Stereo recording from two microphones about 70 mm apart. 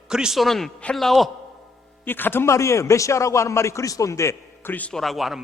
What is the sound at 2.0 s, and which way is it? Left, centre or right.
A man's voice, left.